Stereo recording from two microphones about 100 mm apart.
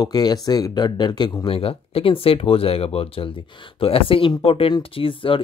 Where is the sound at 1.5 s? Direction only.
75° left (ahead or behind).